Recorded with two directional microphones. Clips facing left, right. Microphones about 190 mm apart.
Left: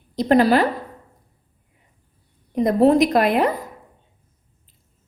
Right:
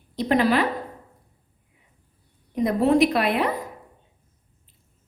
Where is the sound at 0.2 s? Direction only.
40° left (ahead or behind).